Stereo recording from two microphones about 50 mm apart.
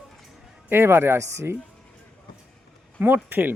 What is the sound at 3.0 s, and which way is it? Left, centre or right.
Speech, right.